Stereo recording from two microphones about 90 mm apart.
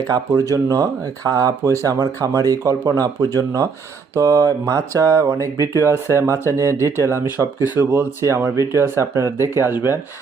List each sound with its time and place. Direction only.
0.5 s speech: 40° right (ahead or behind); by 10.0 s 25° right (ahead or behind)